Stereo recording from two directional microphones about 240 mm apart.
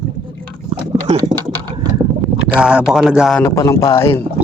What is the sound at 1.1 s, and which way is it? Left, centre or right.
Speech, centre.